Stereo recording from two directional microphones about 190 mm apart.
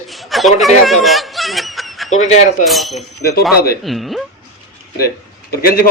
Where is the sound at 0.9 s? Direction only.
Centre (ahead or behind).